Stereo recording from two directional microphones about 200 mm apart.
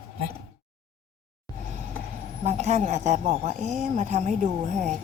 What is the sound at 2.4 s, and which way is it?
A woman's voice, 35° right (ahead or behind).